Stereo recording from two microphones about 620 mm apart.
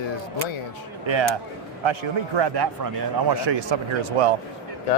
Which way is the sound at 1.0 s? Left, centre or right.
Right.